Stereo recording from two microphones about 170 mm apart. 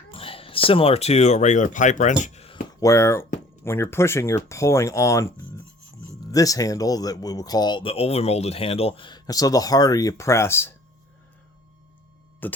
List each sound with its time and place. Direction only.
0.1 s speech: 35° left (ahead or behind)
2.8 s speech: 15° left (ahead or behind)
12.4 s music: 10° left (ahead or behind)